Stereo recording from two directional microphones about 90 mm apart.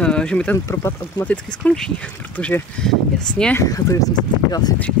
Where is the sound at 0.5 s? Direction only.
30° left (ahead or behind).